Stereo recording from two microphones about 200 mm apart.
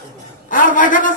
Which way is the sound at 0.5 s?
40° left (ahead or behind).